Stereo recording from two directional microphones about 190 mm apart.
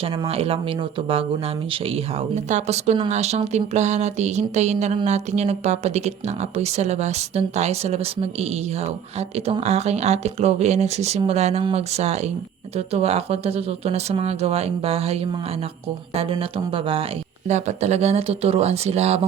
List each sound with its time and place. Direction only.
0.0 s speech: 30° right (ahead or behind)